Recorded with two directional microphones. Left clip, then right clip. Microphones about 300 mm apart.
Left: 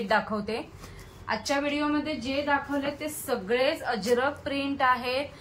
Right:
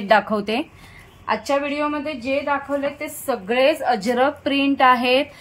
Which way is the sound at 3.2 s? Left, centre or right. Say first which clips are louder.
Right 8 dB; right.